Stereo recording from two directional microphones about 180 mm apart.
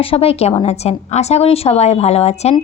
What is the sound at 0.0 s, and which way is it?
A woman's voice, 30° left (ahead or behind).